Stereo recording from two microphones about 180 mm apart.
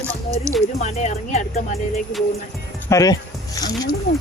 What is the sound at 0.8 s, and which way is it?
Speech, 40° left (ahead or behind).